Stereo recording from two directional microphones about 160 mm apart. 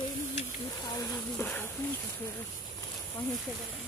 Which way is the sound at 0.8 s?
25° left (ahead or behind).